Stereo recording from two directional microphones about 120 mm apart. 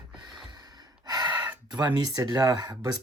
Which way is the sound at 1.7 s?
40° right (ahead or behind).